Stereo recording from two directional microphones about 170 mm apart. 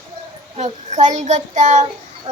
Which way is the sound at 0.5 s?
45° right (ahead or behind).